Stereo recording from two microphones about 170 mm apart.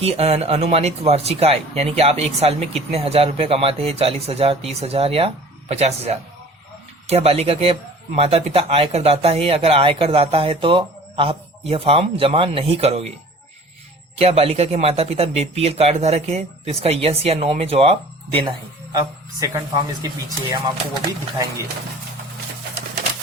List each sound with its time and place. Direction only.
0.0 s speech: 35° right (ahead or behind)
14.2 s speech: 35° right (ahead or behind)
18.9 s speech: 20° right (ahead or behind)